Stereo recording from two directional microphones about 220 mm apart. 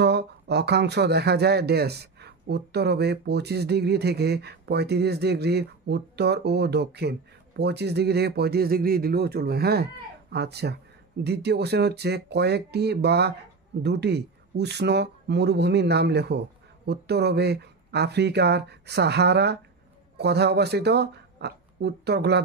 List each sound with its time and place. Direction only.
0.0 s speech: 50° right (ahead or behind)